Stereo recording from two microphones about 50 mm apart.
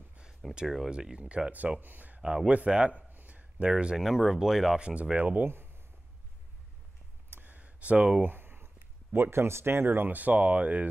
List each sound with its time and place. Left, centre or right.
0.4 s speech: centre
0.8 s speech: centre
1.8 s speech: right
2.5 s speech: right
3.1 s a sound: right
3.7 s speech: centre
4.7 s speech: right
5.1 s speech: right
7.2 s clicking: right
7.5 s a sound: right
8.2 s speech: right
10.1 s speech: right